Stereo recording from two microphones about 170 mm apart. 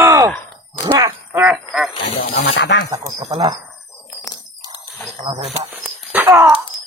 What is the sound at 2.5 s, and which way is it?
Speech, 90° left.